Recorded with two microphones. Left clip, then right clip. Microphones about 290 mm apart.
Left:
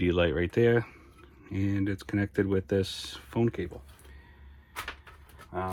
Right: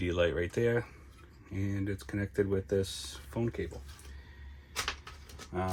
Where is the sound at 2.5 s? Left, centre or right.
Left.